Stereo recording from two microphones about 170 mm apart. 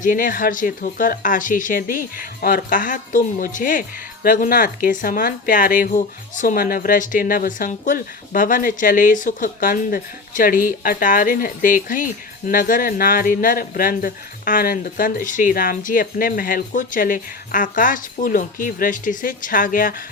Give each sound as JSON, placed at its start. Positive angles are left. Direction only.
{"t": 0.0, "sound": "speech", "side_deg": 55}